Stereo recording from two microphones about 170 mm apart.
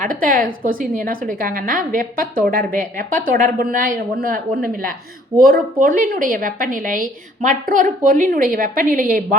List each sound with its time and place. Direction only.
0.0 s a woman's voice: 55° right (ahead or behind)